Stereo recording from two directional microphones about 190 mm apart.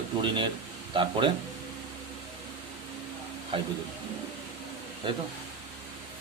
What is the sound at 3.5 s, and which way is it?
Speech, 30° right (ahead or behind).